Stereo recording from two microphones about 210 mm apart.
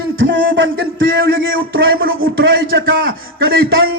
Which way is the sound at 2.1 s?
70° right (ahead or behind).